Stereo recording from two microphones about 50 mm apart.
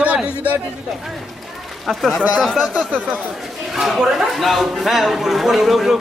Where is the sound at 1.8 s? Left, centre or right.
Centre.